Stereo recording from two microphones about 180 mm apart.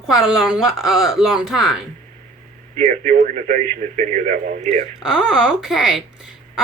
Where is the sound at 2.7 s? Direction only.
50° right (ahead or behind).